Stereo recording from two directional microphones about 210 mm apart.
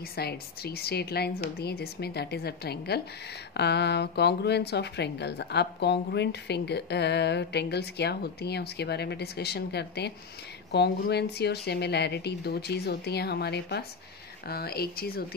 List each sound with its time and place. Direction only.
0.1 s speech: 50° left (ahead or behind)